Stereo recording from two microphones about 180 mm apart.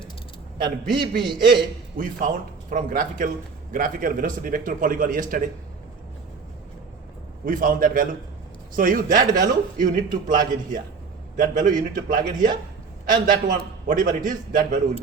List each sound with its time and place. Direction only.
0.9 s a man's voice: 25° right (ahead or behind)
2.0 s a man's voice: 45° right (ahead or behind)
7.4 s a man's voice: 50° right (ahead or behind)